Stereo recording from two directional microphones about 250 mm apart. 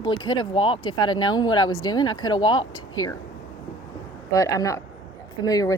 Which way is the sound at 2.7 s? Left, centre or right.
Left.